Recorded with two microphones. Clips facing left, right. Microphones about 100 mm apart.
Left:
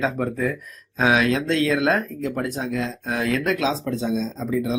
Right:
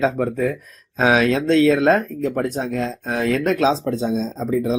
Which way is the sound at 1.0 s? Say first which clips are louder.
Right 3 dB; 35° right (ahead or behind).